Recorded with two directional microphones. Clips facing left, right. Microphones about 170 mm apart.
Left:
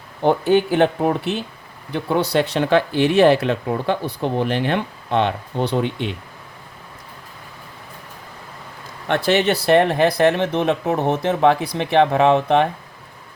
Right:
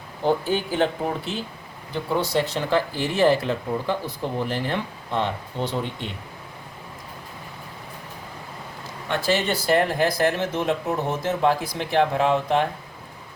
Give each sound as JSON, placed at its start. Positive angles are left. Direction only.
{"t": 0.2, "sound": "speech", "side_deg": 65}
{"t": 9.0, "sound": "speech", "side_deg": 65}